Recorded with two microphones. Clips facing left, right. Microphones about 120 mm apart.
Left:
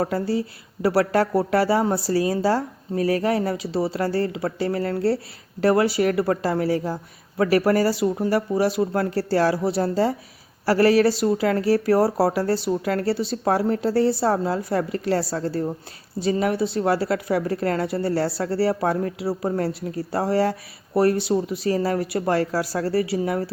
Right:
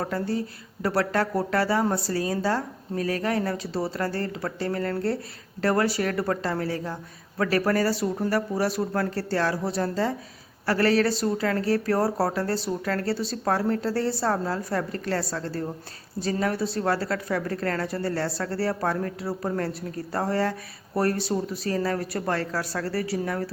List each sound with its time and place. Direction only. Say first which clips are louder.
0.0 s a woman's voice: left 4 dB; 30° left (ahead or behind)
3.7 s speech: left 5 dB; centre (ahead or behind)
4.4 s a woman's voice: left 4 dB; 30° left (ahead or behind)
11.1 s speech: left 5 dB; centre (ahead or behind)
11.3 s a woman's voice: left 4 dB; 25° left (ahead or behind)
21.2 s speech: left 5 dB; centre (ahead or behind)
21.6 s a woman's voice: left 4 dB; 25° left (ahead or behind)